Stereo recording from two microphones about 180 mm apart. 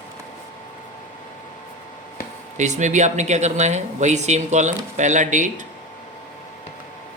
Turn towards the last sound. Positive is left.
turn(degrees=-45)  # may be behind; listen again after turning